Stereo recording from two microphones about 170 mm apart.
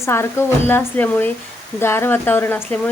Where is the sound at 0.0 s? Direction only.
15° left (ahead or behind).